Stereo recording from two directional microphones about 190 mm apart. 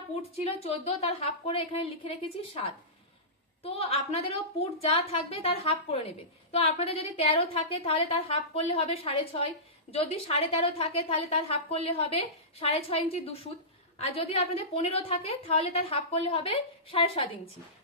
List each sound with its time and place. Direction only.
0.4 s a woman's voice: 30° left (ahead or behind)